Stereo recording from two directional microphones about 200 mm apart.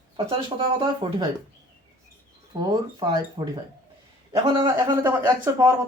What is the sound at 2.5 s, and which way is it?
A man's voice, 20° right (ahead or behind).